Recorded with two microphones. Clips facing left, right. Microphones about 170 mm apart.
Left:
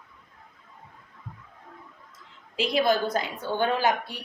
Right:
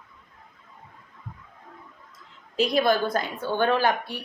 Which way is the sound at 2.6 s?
45° right (ahead or behind).